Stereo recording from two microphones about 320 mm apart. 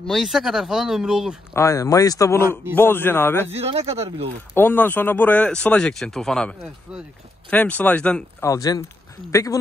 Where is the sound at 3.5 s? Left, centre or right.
Centre.